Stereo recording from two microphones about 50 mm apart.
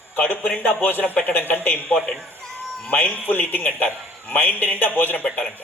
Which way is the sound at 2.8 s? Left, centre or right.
Left.